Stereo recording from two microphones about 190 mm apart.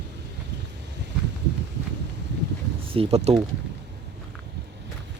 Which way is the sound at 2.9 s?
30° right (ahead or behind).